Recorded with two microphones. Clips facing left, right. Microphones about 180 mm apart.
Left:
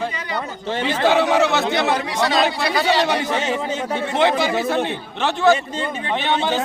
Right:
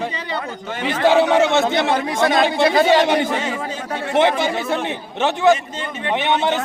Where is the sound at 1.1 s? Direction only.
25° right (ahead or behind).